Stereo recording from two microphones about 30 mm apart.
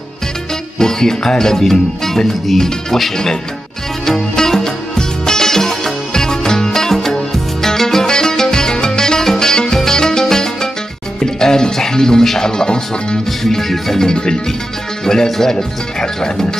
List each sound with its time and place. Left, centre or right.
0.7 s speech: centre
4.0 s music: centre
12.4 s speech: left
13.4 s speech: centre
14.0 s speech: left